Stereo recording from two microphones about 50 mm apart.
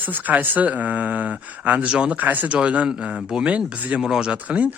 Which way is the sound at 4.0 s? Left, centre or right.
Centre.